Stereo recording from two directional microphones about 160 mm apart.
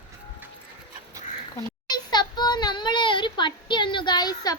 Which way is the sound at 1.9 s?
25° left (ahead or behind).